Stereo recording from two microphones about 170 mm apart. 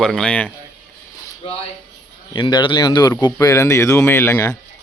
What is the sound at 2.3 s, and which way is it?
Speech, 25° left (ahead or behind).